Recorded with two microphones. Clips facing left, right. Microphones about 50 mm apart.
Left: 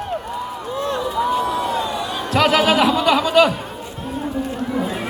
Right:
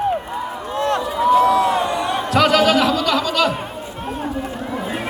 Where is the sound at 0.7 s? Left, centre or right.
Right.